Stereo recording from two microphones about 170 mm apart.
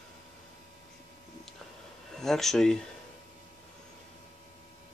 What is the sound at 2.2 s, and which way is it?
Speech, centre (ahead or behind).